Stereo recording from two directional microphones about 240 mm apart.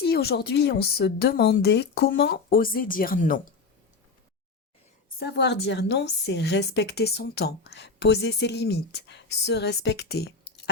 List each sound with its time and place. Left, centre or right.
0.0 s a woman's voice: left
5.0 s a woman's voice: left